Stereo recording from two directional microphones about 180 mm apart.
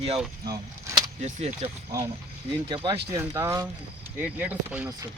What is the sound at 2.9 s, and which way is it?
Speech, 15° right (ahead or behind).